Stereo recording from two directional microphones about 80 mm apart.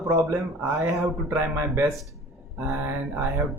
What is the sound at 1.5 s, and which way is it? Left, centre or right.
Speech, right.